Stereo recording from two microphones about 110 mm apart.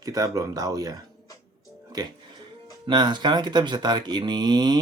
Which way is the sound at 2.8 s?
40° right (ahead or behind).